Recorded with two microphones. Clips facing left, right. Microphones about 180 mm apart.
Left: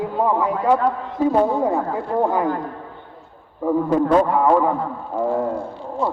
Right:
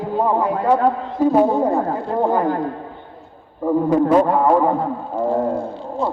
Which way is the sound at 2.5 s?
30° right (ahead or behind).